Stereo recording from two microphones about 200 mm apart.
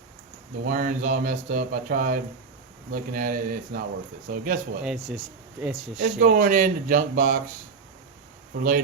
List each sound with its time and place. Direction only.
0.6 s speech: 45° right (ahead or behind)
4.8 s speech: centre (ahead or behind)
6.0 s speech: 45° right (ahead or behind)